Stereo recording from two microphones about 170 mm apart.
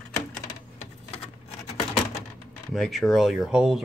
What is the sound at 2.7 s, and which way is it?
Speech, centre (ahead or behind).